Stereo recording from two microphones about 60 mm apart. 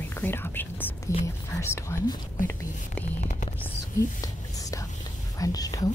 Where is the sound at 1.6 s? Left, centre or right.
Left.